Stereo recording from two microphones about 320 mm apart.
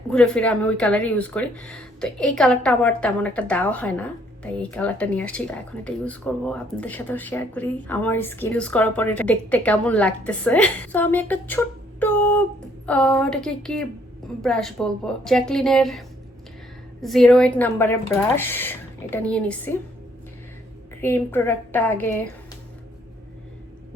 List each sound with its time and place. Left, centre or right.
0.1 s speech: centre
21.0 s a woman's voice: centre